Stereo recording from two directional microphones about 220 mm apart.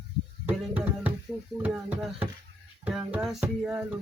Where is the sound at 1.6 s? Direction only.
5° right (ahead or behind).